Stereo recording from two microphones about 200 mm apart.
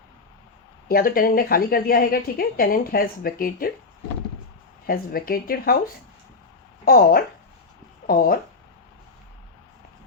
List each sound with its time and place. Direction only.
0.9 s a woman's voice: 45° left (ahead or behind)
4.9 s a woman's voice: 45° left (ahead or behind)
6.8 s a woman's voice: 50° left (ahead or behind)